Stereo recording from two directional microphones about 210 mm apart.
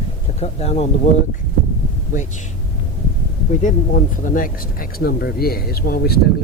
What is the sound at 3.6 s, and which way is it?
Speech, 40° left (ahead or behind).